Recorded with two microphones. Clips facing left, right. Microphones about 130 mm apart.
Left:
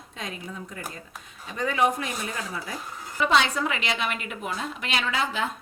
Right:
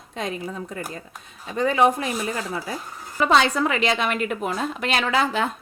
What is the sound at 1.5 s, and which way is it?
A woman's voice, 30° right (ahead or behind).